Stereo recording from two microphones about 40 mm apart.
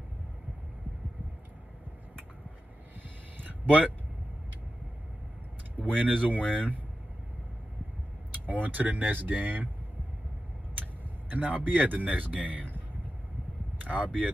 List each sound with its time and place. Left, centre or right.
3.3 s a sound: right
5.8 s speech: right
8.3 s speech: right
10.8 s speech: right
13.8 s speech: right